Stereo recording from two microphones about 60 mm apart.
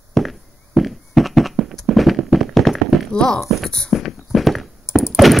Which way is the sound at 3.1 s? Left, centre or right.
Centre.